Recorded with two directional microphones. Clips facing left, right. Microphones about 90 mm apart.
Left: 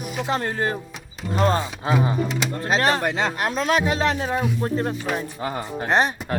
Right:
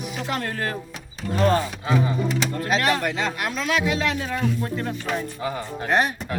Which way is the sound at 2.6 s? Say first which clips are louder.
Left 2 dB; 30° left (ahead or behind).